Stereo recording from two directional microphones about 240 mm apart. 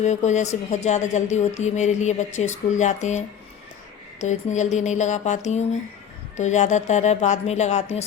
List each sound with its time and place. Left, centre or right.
0.0 s a woman's voice: left